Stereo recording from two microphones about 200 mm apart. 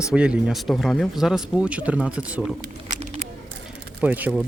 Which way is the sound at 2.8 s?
35° right (ahead or behind).